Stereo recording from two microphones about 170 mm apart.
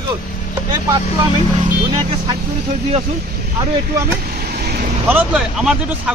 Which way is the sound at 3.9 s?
60° right (ahead or behind).